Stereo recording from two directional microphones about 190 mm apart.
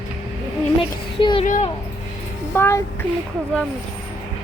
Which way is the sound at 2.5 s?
15° left (ahead or behind).